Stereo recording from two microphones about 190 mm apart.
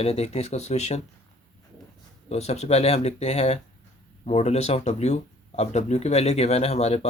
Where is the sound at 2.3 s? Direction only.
35° left (ahead or behind).